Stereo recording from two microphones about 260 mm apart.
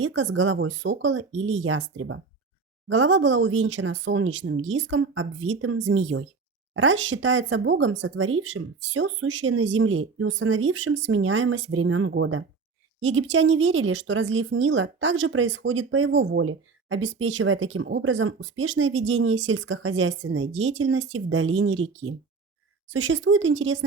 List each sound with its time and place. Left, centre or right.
0.0 s speech: right